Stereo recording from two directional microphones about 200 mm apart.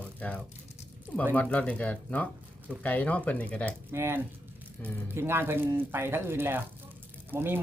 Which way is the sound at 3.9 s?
10° right (ahead or behind).